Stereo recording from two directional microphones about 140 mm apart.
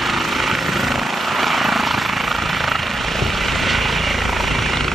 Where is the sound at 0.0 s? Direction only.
Centre (ahead or behind).